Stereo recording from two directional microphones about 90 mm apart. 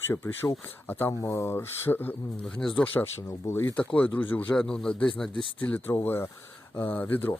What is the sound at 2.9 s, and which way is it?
Speech, 25° left (ahead or behind).